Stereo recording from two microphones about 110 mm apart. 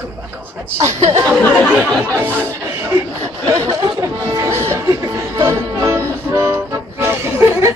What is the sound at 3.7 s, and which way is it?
Music, 35° right (ahead or behind).